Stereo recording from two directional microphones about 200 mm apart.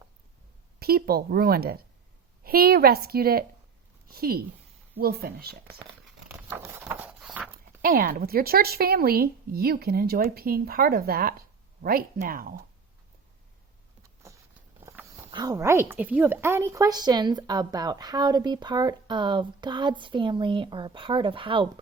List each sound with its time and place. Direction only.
0.8 s a woman's voice: 50° right (ahead or behind)
6.2 s a sound: 10° right (ahead or behind)
7.8 s a woman's voice: 45° right (ahead or behind)
14.8 s speech: 15° right (ahead or behind)